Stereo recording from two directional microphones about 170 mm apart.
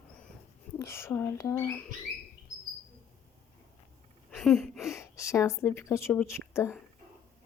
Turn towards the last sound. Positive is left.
turn(degrees=15)  # may be behind; listen again after turning